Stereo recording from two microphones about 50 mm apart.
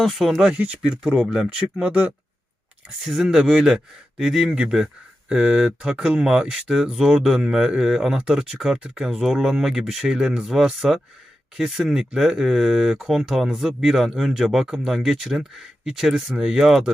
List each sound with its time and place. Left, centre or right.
0.0 s speech: centre
0.5 s speech: right
1.0 s speech: centre
3.0 s speech: centre